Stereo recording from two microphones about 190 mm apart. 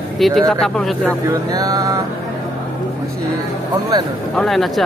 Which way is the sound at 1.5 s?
20° right (ahead or behind).